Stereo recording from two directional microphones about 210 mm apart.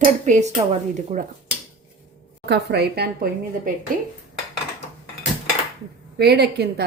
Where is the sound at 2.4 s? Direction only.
50° right (ahead or behind).